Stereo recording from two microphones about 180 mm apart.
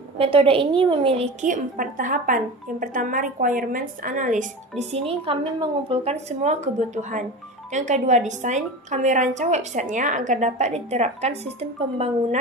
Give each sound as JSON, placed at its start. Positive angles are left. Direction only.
{"t": 0.2, "sound": "a woman's voice", "side_deg": -30}